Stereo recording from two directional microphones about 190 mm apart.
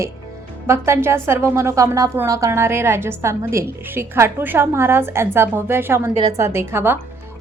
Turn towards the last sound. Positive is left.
turn(degrees=-10)  # may be behind; listen again after turning